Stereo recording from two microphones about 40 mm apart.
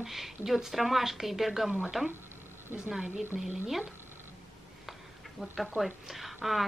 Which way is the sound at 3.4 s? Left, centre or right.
Centre.